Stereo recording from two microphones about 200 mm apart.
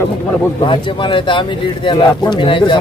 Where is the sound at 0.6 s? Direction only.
25° left (ahead or behind).